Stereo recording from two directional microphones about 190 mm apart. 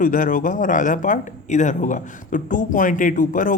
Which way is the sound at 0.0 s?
45° left (ahead or behind).